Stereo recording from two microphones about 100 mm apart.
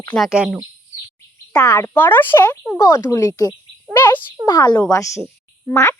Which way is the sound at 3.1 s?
35° left (ahead or behind).